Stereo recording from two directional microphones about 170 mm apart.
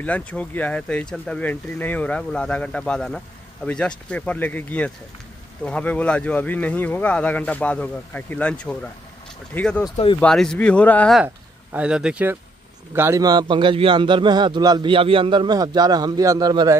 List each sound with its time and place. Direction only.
0.0 s speech: 10° left (ahead or behind)
9.8 s speech: 30° left (ahead or behind)
10.2 s speech: 5° left (ahead or behind)
11.2 s a man's voice: 10° right (ahead or behind)